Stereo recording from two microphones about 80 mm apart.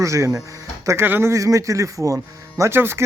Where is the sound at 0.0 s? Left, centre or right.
Right.